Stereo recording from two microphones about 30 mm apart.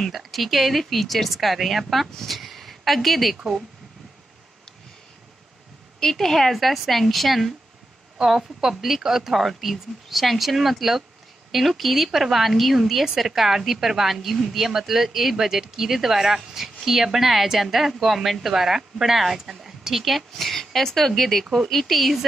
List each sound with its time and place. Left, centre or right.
0.1 s a woman's voice: centre
5.9 s a woman's voice: centre
8.4 s a woman's voice: right
8.8 s a woman's voice: centre